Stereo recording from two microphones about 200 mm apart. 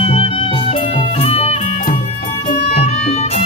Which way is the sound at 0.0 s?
30° left (ahead or behind).